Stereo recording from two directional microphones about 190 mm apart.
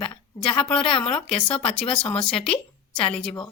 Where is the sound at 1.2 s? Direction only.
5° left (ahead or behind).